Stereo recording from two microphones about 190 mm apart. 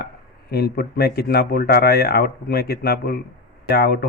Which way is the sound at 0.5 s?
55° left (ahead or behind).